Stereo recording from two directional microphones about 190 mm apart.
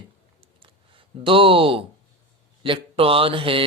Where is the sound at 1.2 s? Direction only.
30° right (ahead or behind).